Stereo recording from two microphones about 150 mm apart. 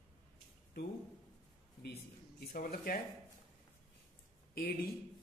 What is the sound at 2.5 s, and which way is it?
Speech, 85° left.